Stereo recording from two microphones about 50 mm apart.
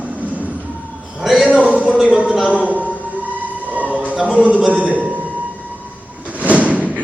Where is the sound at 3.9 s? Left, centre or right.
Right.